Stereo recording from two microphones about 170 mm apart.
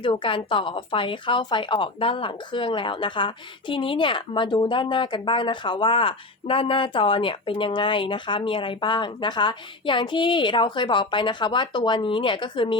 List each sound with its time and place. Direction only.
0.0 s a woman's voice: 30° left (ahead or behind)